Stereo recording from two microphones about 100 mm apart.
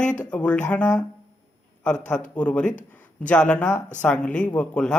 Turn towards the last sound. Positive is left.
turn(degrees=10)  # may be behind; listen again after turning